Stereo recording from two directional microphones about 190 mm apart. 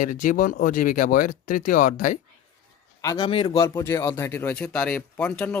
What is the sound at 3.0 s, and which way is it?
Speech, 20° left (ahead or behind).